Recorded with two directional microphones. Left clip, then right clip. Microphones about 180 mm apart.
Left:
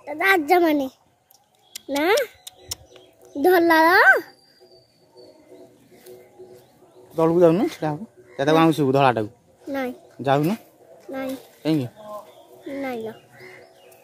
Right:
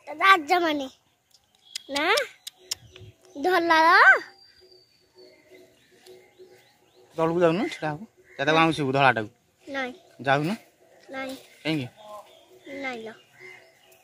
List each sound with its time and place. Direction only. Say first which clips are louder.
0.0 s a child's voice: even; 30° left (ahead or behind)
2.4 s music: even; 5° left (ahead or behind)
3.3 s a child's voice: left 4 dB; 35° left (ahead or behind)
7.2 s speech: left 6 dB; centre (ahead or behind)
9.7 s speech: left 4 dB; 35° left (ahead or behind)
10.2 s speech: left 3 dB; 5° left (ahead or behind)
11.1 s speech: left 5 dB; 35° left (ahead or behind)
11.6 s speech: left 5 dB; 5° left (ahead or behind)
12.8 s speech: left 4 dB; 30° left (ahead or behind)